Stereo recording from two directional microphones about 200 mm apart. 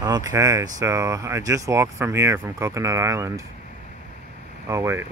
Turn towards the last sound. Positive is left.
turn(degrees=-15)  # may be behind; listen again after turning